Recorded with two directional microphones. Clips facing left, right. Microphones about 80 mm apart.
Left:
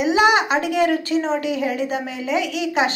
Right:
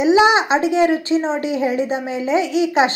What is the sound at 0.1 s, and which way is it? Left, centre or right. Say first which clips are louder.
A woman's voice: right 3 dB; right.